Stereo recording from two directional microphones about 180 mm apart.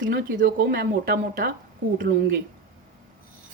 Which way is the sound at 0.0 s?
65° right (ahead or behind).